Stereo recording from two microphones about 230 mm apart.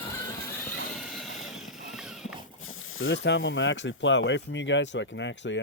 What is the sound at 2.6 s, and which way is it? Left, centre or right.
Speech, left.